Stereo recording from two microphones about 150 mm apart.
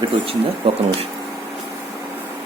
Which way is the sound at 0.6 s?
40° right (ahead or behind).